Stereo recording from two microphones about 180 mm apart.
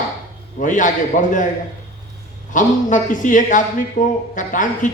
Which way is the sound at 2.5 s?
45° left (ahead or behind).